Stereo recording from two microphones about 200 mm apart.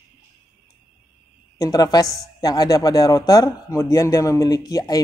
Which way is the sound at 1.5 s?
20° left (ahead or behind).